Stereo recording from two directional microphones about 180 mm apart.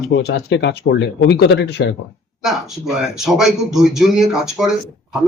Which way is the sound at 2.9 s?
Centre (ahead or behind).